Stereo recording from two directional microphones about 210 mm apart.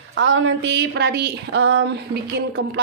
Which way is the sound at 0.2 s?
65° right (ahead or behind).